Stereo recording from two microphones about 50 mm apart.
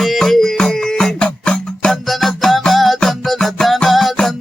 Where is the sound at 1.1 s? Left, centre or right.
Left.